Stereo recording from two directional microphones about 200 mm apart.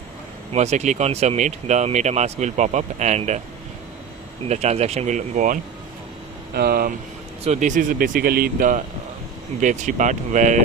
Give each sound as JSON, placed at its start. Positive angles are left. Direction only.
{"t": 0.5, "sound": "speech", "side_deg": -35}
{"t": 4.4, "sound": "speech", "side_deg": -35}
{"t": 6.5, "sound": "speech", "side_deg": -50}
{"t": 7.4, "sound": "speech", "side_deg": -35}